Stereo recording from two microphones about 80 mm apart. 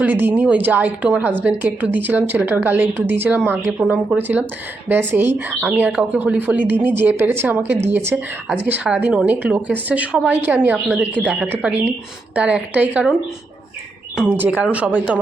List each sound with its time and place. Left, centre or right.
0.0 s a woman's voice: right
14.3 s speech: right